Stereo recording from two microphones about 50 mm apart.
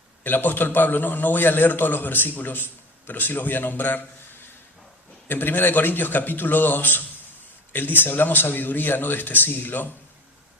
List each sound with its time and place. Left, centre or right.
0.3 s a man's voice: left
5.3 s a man's voice: left